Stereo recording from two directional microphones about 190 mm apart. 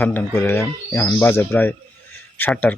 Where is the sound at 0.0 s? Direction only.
10° left (ahead or behind).